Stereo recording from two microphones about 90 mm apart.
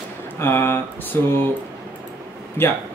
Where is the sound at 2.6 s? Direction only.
25° left (ahead or behind).